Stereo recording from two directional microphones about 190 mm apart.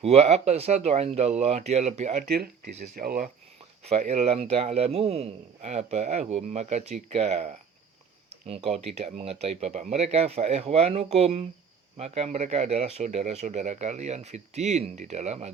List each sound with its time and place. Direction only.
0.0 s a man's voice: 35° right (ahead or behind)
2.2 s speech: 55° right (ahead or behind)
3.8 s a man's voice: 35° right (ahead or behind)